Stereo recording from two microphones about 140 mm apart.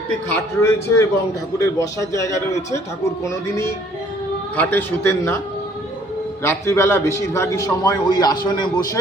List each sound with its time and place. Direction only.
0.3 s a man's voice: 20° left (ahead or behind)
6.4 s a man's voice: 20° left (ahead or behind)